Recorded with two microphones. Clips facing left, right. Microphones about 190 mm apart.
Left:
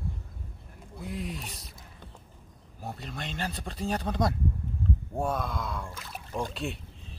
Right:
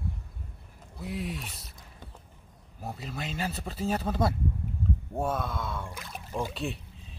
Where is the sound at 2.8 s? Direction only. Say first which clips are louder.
Right 1 dB; centre (ahead or behind).